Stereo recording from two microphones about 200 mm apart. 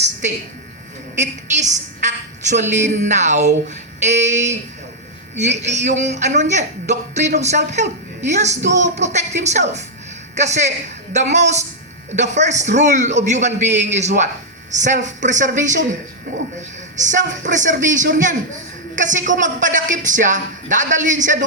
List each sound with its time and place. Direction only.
1.2 s a man's voice: 35° right (ahead or behind)
17.0 s a man's voice: 40° right (ahead or behind)